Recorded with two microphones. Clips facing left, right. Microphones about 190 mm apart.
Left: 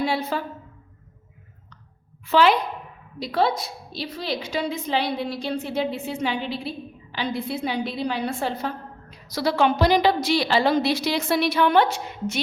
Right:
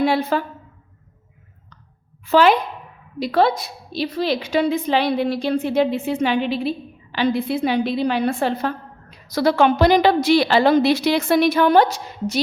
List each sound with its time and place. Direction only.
0.0 s a woman's voice: 60° right (ahead or behind)
2.2 s a woman's voice: 45° right (ahead or behind)
3.3 s a woman's voice: 60° right (ahead or behind)
9.2 s a woman's voice: 55° right (ahead or behind)